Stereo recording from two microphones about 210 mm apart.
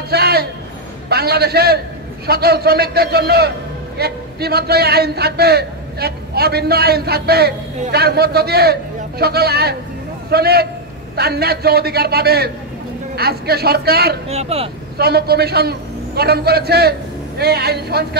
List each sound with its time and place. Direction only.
0.1 s a sound: 50° right (ahead or behind)
1.0 s a man's voice: 50° right (ahead or behind)
14.3 s speech: 30° right (ahead or behind)
15.0 s a man's voice: 50° right (ahead or behind)